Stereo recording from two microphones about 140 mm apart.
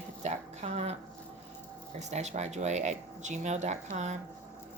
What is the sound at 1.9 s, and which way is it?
Speech, 55° right (ahead or behind).